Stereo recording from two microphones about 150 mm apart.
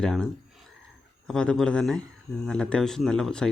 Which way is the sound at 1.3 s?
5° left (ahead or behind).